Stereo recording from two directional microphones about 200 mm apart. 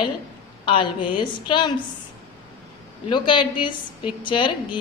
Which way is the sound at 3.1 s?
25° left (ahead or behind).